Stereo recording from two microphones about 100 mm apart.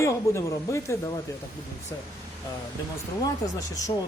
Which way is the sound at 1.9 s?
40° left (ahead or behind).